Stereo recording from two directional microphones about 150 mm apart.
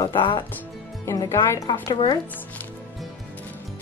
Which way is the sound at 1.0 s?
20° left (ahead or behind).